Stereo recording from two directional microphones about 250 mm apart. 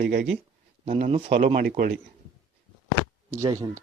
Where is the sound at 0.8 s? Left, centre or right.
Right.